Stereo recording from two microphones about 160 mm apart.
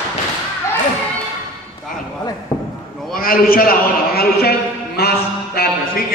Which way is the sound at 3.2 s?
65° left (ahead or behind).